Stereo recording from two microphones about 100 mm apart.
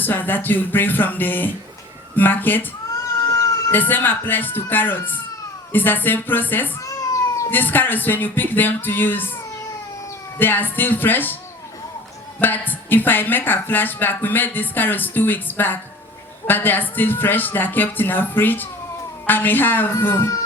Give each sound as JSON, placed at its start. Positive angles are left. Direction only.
{"t": 0.0, "sound": "a woman's voice", "side_deg": 20}
{"t": 3.7, "sound": "a woman's voice", "side_deg": 20}
{"t": 6.8, "sound": "cat", "side_deg": 30}
{"t": 7.5, "sound": "a woman's voice", "side_deg": 20}
{"t": 10.3, "sound": "a woman's voice", "side_deg": 20}
{"t": 12.4, "sound": "a woman's voice", "side_deg": 20}